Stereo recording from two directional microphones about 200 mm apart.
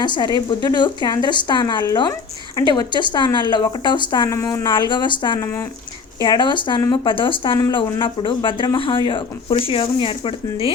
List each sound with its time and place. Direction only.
0.0 s speech: 20° left (ahead or behind)